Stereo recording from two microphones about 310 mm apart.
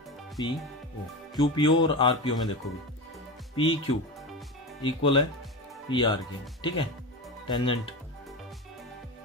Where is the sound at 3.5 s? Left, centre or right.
Centre.